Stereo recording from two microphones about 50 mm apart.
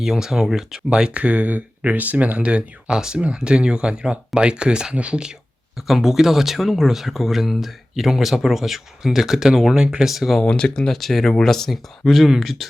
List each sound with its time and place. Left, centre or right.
0.0 s speech: centre
5.7 s speech: centre
10.1 s speech: centre
10.4 s speech: left
10.8 s speech: centre
12.0 s speech: centre